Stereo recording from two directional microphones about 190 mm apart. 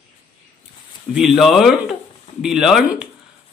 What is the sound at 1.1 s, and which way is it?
Speech, centre (ahead or behind).